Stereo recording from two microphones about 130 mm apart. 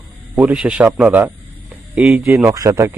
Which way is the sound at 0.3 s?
10° right (ahead or behind).